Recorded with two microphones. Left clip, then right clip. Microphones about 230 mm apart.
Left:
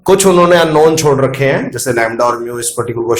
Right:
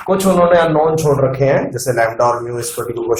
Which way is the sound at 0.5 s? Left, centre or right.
Left.